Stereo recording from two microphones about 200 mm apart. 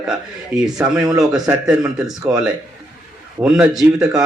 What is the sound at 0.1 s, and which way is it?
Speech, centre (ahead or behind).